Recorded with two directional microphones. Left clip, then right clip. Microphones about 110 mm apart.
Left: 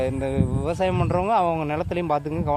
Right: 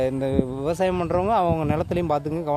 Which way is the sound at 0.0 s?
55° right (ahead or behind).